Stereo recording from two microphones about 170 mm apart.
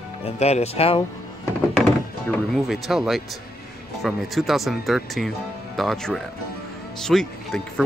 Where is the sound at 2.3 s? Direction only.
Centre (ahead or behind).